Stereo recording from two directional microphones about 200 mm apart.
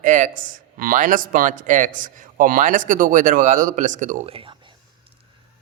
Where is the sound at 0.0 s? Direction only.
40° right (ahead or behind).